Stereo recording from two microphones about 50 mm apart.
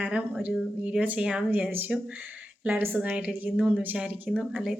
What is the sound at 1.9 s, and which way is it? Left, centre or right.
A woman's voice, centre.